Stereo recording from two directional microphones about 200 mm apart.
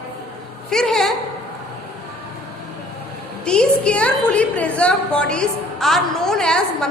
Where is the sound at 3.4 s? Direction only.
5° left (ahead or behind).